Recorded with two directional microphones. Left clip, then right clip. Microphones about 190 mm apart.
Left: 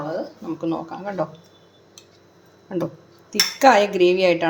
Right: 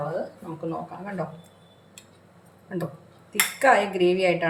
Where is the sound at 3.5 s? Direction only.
40° left (ahead or behind).